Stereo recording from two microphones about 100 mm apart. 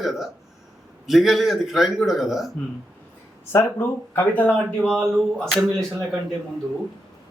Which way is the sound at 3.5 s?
20° left (ahead or behind).